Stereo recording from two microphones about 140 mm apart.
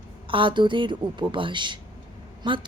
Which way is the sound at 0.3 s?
35° right (ahead or behind).